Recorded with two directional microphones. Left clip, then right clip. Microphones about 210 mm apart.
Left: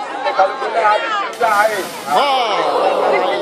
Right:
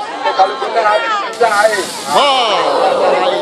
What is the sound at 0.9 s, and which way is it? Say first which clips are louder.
Speech: right 2 dB; 45° left (ahead or behind).